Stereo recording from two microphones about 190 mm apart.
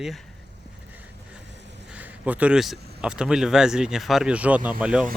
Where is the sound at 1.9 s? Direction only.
10° right (ahead or behind).